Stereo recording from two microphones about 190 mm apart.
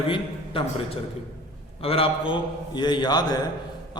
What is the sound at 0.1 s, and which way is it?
A man's voice, 30° left (ahead or behind).